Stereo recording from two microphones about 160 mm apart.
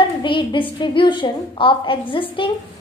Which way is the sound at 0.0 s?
30° left (ahead or behind).